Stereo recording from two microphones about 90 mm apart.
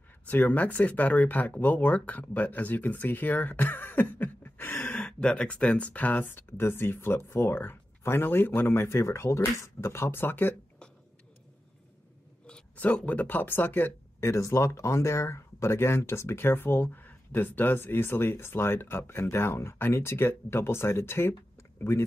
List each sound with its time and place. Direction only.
0.3 s speech: 20° left (ahead or behind)
12.4 s speech: 15° left (ahead or behind)